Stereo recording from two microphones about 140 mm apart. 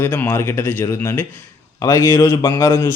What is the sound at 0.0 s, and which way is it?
A man's voice, 15° left (ahead or behind).